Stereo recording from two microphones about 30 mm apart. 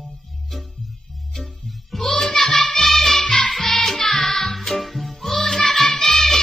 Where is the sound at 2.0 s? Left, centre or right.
Centre.